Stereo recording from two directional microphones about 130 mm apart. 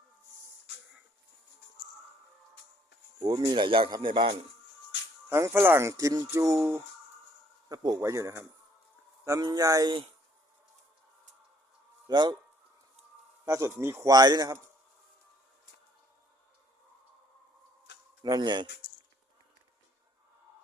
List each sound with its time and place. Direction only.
3.2 s speech: 35° right (ahead or behind)
5.3 s speech: 20° right (ahead or behind)
5.9 s speech: 30° right (ahead or behind)
7.7 s speech: 30° right (ahead or behind)
12.0 s speech: 35° right (ahead or behind)
13.4 s speech: 25° right (ahead or behind)
18.2 s speech: 30° right (ahead or behind)